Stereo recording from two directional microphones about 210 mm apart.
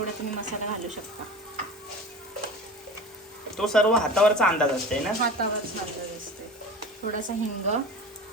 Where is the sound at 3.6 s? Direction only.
Centre (ahead or behind).